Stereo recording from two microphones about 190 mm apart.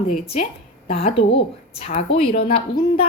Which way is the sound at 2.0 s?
30° left (ahead or behind).